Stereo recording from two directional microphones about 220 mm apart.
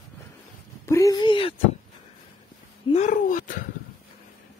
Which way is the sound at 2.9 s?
35° left (ahead or behind).